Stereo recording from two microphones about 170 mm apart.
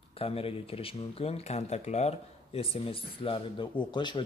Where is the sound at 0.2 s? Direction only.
35° left (ahead or behind).